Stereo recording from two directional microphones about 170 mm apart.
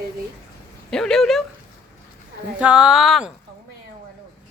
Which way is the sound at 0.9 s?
5° left (ahead or behind).